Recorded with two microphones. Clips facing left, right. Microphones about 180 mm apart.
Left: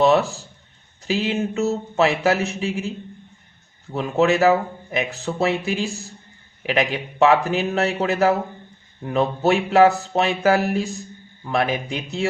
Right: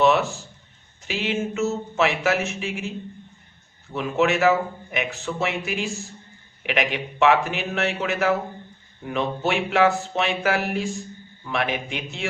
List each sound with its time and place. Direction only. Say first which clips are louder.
0.0 s a man's voice: left 2 dB; 35° left (ahead or behind)
3.9 s a man's voice: left 3 dB; 35° left (ahead or behind)